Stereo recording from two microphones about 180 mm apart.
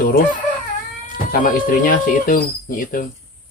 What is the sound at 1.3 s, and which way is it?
Speech, 50° left (ahead or behind).